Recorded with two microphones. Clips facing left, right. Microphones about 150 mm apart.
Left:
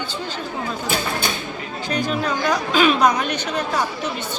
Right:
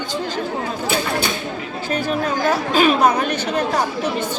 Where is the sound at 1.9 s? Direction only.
45° right (ahead or behind).